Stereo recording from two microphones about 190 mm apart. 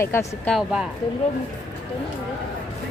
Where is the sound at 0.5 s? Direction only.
5° right (ahead or behind).